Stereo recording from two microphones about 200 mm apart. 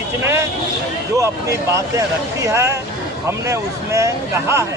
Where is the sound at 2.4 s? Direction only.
15° right (ahead or behind).